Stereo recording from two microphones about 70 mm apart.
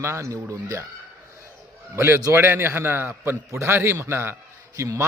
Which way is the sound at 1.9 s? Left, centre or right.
Right.